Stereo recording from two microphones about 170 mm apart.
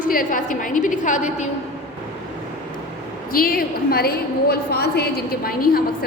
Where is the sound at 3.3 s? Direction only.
60° left (ahead or behind).